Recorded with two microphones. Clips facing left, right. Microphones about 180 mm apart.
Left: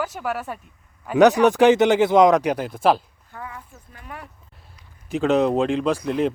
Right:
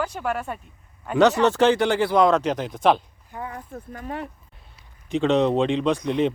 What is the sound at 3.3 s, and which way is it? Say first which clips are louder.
Speech: right 3 dB; 15° right (ahead or behind).